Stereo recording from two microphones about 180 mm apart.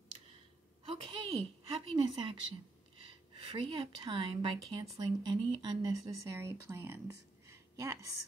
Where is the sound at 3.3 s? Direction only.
25° right (ahead or behind).